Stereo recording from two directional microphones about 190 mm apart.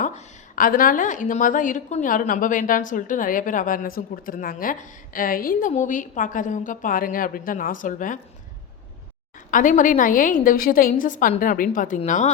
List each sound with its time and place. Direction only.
0.0 s a woman's voice: 45° left (ahead or behind)
9.5 s a woman's voice: 45° left (ahead or behind)